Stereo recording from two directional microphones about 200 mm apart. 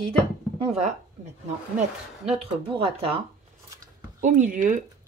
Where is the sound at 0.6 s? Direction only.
30° right (ahead or behind).